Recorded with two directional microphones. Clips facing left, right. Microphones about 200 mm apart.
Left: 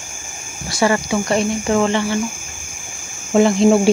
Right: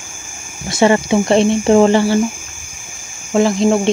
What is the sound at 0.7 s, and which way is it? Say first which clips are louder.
Speech: right 5 dB; 25° right (ahead or behind).